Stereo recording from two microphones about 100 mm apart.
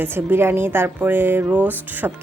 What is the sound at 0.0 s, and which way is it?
A woman's voice, 20° right (ahead or behind).